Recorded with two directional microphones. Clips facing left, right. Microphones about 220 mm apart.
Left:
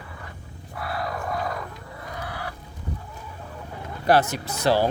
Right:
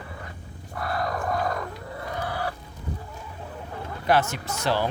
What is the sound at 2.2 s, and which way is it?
Chicken, 35° right (ahead or behind).